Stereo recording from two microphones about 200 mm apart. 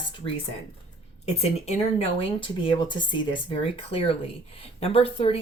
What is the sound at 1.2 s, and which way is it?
Speech, 30° left (ahead or behind).